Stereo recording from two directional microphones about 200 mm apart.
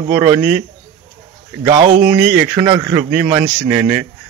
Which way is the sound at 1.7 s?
30° right (ahead or behind).